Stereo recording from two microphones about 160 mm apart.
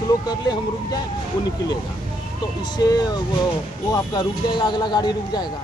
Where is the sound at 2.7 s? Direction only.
25° left (ahead or behind).